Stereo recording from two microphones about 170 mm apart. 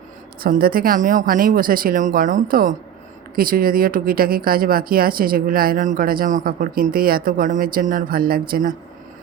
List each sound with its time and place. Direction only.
0.4 s speech: 60° right (ahead or behind)